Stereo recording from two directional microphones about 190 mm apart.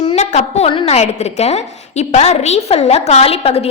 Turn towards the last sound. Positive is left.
turn(degrees=30)  # may be behind; listen again after turning